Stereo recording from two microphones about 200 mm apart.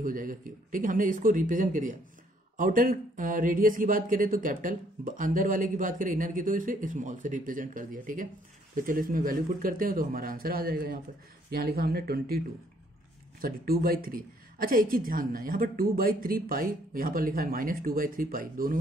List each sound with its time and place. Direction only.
0.0 s speech: 45° right (ahead or behind)
13.4 s speech: 50° right (ahead or behind)